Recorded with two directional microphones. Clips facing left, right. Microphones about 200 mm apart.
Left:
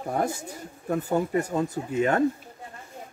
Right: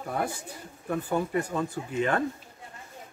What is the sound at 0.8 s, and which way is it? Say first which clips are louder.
Speech: left 3 dB; 40° left (ahead or behind).